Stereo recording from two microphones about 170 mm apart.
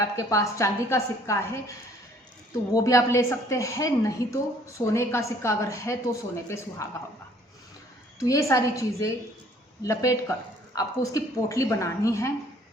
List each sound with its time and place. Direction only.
0.0 s a woman's voice: 20° left (ahead or behind)
2.7 s a woman's voice: 20° left (ahead or behind)
8.2 s a woman's voice: 20° left (ahead or behind)